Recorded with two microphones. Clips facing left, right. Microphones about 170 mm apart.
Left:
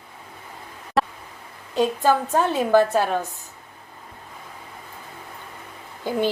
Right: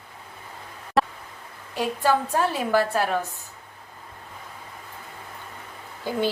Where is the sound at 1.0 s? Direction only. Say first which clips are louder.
Even; centre (ahead or behind).